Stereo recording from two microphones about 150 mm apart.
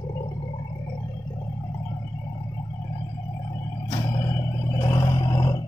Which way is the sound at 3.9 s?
25° left (ahead or behind).